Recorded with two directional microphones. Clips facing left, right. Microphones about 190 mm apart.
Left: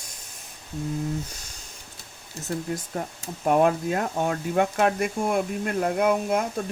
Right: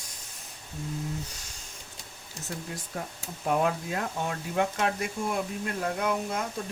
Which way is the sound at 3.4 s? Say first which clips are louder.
Left 6 dB; 55° left (ahead or behind).